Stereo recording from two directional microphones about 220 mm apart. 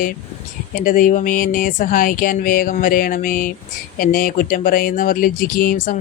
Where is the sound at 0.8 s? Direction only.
40° left (ahead or behind).